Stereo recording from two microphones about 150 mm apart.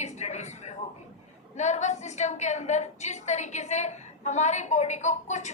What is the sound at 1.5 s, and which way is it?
A woman's voice, 50° left (ahead or behind).